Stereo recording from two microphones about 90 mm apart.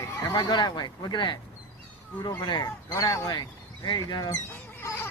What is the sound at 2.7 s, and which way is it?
Speech, 40° left (ahead or behind).